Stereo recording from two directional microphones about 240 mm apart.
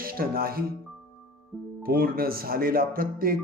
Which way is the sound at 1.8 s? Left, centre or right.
Right.